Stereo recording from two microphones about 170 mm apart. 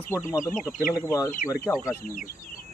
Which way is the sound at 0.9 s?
20° left (ahead or behind).